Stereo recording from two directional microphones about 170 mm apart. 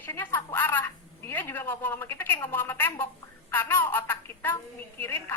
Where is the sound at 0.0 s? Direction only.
10° left (ahead or behind).